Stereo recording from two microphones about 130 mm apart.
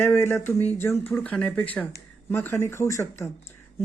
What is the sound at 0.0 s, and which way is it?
Speech, 15° left (ahead or behind).